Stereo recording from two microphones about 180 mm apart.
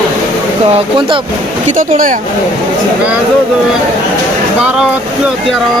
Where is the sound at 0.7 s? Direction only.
30° right (ahead or behind).